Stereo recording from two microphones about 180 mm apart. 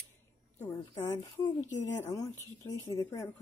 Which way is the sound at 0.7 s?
15° left (ahead or behind).